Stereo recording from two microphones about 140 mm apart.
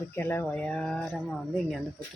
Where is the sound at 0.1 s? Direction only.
15° left (ahead or behind).